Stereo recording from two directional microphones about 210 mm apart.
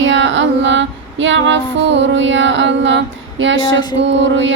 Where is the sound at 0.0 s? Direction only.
60° right (ahead or behind).